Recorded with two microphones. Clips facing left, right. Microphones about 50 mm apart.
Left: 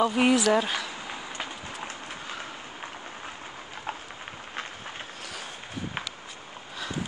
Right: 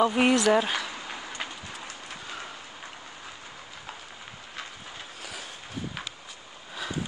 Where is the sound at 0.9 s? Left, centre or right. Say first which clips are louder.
Left 1 dB; centre.